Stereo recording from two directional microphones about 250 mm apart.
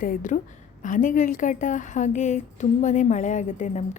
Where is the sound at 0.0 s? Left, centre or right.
Left.